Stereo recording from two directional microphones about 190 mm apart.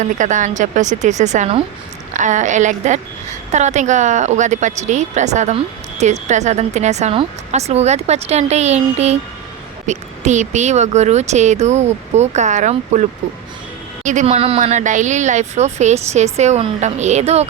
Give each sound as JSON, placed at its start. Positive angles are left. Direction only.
{"t": 0.0, "sound": "a woman's voice", "side_deg": -40}